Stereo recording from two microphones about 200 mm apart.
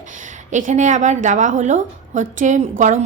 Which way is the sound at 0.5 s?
40° right (ahead or behind).